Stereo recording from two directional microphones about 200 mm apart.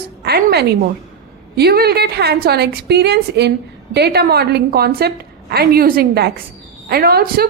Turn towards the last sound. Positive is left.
turn(degrees=-50)  # may be behind; listen again after turning